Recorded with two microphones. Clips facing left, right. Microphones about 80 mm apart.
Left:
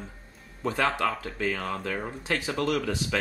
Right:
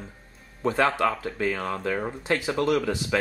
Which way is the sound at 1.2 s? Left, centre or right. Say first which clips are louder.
Right 4 dB; right.